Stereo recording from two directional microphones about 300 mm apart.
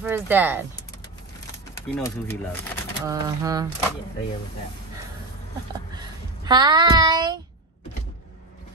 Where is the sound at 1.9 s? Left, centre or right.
Centre.